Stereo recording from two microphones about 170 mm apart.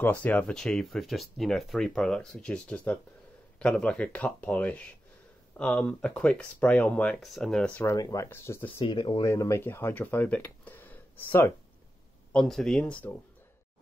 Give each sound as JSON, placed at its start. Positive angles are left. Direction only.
{"t": 0.0, "sound": "speech", "side_deg": 10}
{"t": 7.9, "sound": "speech", "side_deg": 20}
{"t": 8.6, "sound": "speech", "side_deg": 30}
{"t": 9.3, "sound": "speech", "side_deg": 15}